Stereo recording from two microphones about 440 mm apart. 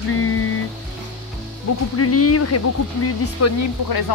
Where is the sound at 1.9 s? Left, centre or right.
Left.